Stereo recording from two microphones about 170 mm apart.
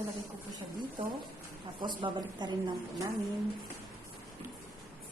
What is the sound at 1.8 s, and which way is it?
Speech, 25° right (ahead or behind).